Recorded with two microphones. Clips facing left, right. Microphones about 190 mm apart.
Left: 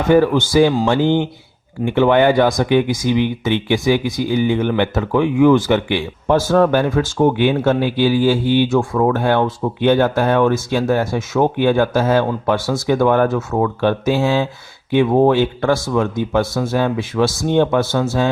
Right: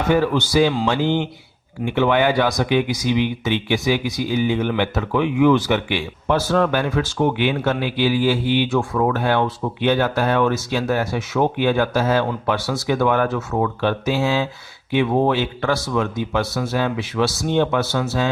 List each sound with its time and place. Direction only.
0.1 s speech: 50° left (ahead or behind)